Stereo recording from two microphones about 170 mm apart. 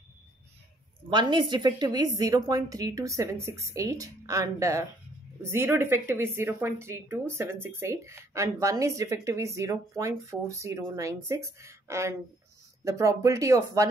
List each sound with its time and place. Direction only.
1.1 s a woman's voice: 25° right (ahead or behind)